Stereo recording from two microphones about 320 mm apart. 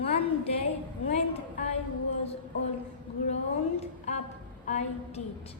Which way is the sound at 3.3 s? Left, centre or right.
Left.